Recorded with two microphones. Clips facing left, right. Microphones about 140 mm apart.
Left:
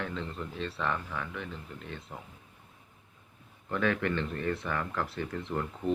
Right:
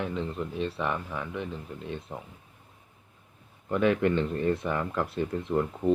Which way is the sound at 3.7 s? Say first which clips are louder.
Right 5 dB; 20° right (ahead or behind).